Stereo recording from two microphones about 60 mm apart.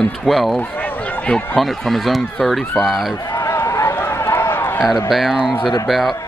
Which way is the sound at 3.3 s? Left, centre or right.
Left.